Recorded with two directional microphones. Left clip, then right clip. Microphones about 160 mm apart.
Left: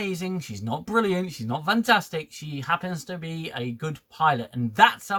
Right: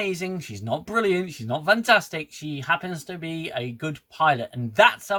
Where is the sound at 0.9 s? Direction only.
10° right (ahead or behind).